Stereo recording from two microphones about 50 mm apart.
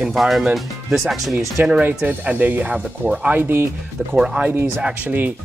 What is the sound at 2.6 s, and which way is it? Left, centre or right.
Speech, right.